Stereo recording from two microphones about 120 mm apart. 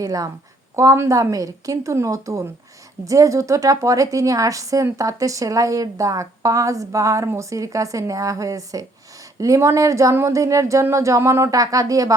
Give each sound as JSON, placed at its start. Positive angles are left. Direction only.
{"t": 0.0, "sound": "a woman's voice", "side_deg": -30}